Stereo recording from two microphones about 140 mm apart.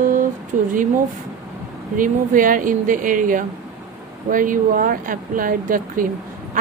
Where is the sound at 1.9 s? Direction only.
75° right (ahead or behind).